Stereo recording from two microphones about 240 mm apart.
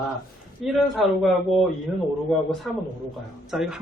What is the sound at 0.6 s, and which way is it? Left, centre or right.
Speech, centre.